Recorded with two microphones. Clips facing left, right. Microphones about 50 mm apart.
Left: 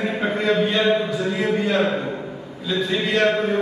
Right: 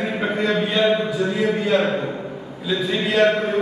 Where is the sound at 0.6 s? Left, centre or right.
Centre.